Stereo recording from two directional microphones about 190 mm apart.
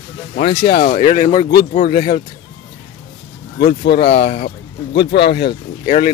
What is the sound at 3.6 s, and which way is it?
Speech, 60° left (ahead or behind).